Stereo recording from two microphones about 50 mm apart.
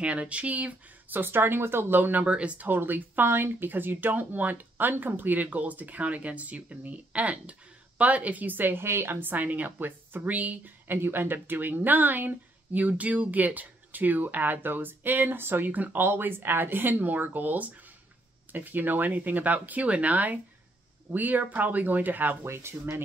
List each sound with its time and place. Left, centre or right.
0.0 s speech: right
2.2 s speech: right
2.7 s speech: right
9.3 s speech: right
16.0 s speech: right
22.4 s speech: right